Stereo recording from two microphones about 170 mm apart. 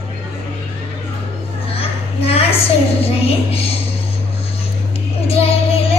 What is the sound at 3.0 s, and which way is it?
Speech, 35° left (ahead or behind).